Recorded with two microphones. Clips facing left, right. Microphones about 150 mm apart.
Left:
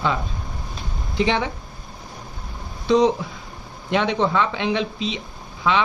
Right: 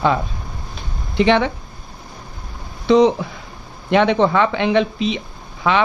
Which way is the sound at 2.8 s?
65° right (ahead or behind).